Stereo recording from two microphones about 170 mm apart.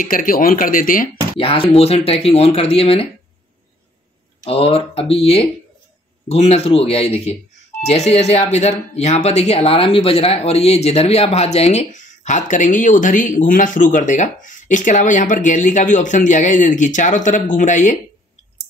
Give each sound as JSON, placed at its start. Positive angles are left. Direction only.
{"t": 0.0, "sound": "speech", "side_deg": 55}
{"t": 1.4, "sound": "speech", "side_deg": 30}
{"t": 4.5, "sound": "speech", "side_deg": 35}